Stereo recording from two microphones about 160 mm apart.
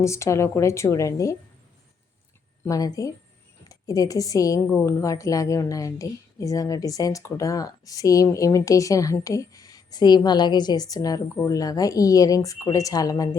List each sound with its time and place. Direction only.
0.0 s a woman's voice: 20° left (ahead or behind)
2.6 s a woman's voice: 20° left (ahead or behind)